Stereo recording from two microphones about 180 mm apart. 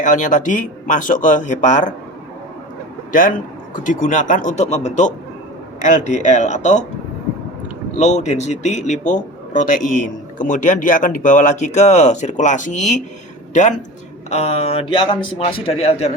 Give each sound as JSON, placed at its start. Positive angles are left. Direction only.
{"t": 0.0, "sound": "a man's voice", "side_deg": 45}
{"t": 3.1, "sound": "a man's voice", "side_deg": 50}
{"t": 7.9, "sound": "a man's voice", "side_deg": 40}